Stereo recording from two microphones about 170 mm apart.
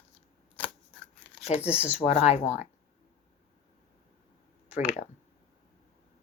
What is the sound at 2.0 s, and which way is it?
Speech, 40° left (ahead or behind).